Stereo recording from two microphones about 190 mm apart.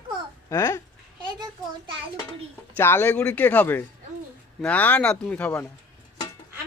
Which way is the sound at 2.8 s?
10° left (ahead or behind).